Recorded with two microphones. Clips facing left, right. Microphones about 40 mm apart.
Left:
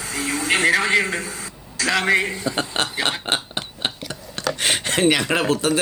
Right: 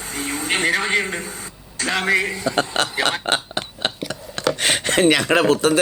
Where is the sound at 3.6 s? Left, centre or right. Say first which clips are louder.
Right 3 dB; right.